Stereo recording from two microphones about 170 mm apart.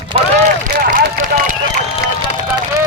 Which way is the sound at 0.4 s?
55° right (ahead or behind).